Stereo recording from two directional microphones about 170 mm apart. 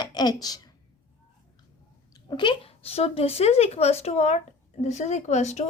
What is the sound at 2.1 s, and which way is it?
Speech, 25° left (ahead or behind).